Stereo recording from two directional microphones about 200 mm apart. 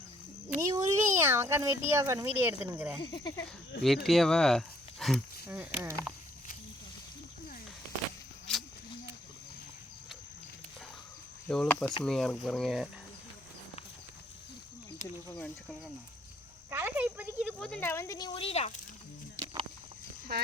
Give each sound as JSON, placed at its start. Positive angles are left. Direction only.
{"t": 0.5, "sound": "speech", "side_deg": -15}
{"t": 3.0, "sound": "speech", "side_deg": 20}
{"t": 3.8, "sound": "speech", "side_deg": 0}
{"t": 8.5, "sound": "a sound", "side_deg": 5}
{"t": 11.4, "sound": "speech", "side_deg": 5}
{"t": 15.3, "sound": "speech", "side_deg": 10}
{"t": 16.6, "sound": "speech", "side_deg": -10}
{"t": 17.6, "sound": "speech", "side_deg": 10}
{"t": 18.3, "sound": "speech", "side_deg": 30}